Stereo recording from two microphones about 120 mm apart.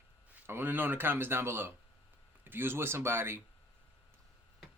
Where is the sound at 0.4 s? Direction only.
20° right (ahead or behind).